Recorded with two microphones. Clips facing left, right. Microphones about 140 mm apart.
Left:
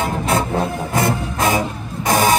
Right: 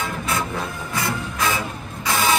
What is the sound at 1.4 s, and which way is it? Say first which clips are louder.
Vehicle: left 6 dB; 50° left (ahead or behind).